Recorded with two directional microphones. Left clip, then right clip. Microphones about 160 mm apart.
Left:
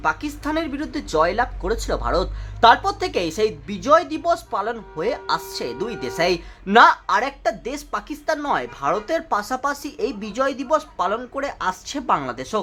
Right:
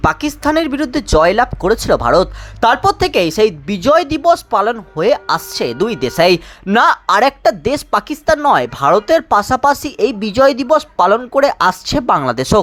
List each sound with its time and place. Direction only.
0.0 s speech: 50° right (ahead or behind)